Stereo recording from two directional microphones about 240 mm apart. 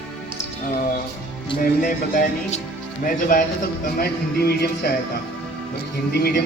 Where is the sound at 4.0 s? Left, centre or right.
Left.